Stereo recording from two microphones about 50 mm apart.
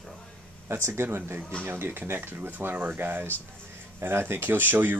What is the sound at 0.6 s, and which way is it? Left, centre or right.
Speech, right.